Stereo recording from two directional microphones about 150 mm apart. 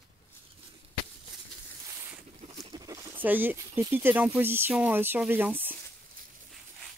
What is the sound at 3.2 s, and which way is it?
Speech, 10° right (ahead or behind).